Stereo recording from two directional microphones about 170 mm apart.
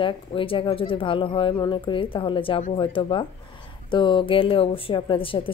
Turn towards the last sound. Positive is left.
turn(degrees=30)  # may be behind; listen again after turning